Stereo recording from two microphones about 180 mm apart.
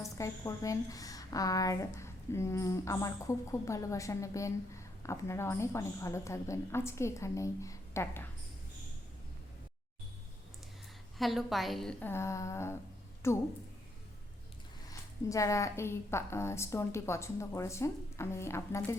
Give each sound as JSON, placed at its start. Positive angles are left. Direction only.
{"t": 0.0, "sound": "a woman's voice", "side_deg": 15}
{"t": 11.2, "sound": "a woman's voice", "side_deg": 0}
{"t": 14.8, "sound": "a woman's voice", "side_deg": 15}